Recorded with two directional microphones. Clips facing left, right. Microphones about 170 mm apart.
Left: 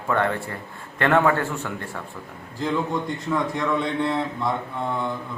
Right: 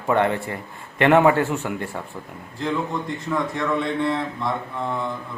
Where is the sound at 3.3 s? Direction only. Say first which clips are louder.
Even; centre (ahead or behind).